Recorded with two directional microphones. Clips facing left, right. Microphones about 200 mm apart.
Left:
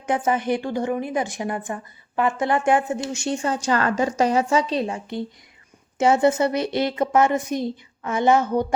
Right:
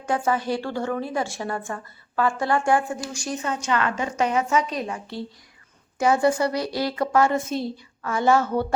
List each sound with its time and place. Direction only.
0.1 s a woman's voice: 20° left (ahead or behind)